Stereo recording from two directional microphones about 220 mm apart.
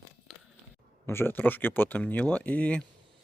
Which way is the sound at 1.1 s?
10° left (ahead or behind).